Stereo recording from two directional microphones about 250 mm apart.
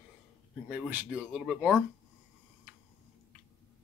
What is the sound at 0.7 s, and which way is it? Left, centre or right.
Speech, centre.